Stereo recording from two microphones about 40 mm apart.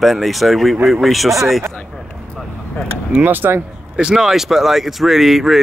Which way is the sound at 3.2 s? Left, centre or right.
Right.